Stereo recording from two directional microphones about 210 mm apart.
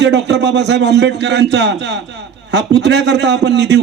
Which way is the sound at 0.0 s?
55° right (ahead or behind).